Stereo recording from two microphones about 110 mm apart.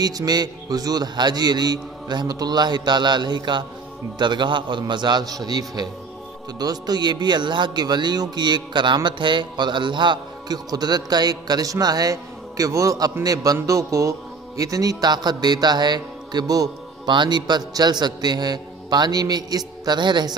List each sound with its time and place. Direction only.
0.0 s a man's voice: 35° right (ahead or behind)
13.6 s music: 30° right (ahead or behind)
14.6 s speech: 35° right (ahead or behind)